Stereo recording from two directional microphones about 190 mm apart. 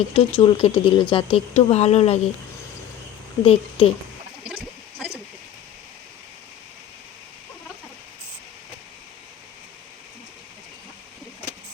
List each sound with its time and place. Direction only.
0.1 s speech: 30° left (ahead or behind)
3.4 s a woman's voice: 30° left (ahead or behind)